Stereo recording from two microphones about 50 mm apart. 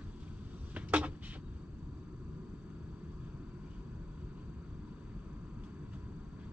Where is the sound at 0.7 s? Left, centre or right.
Right.